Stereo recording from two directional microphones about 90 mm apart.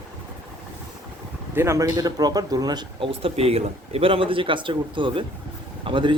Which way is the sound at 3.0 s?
90° right.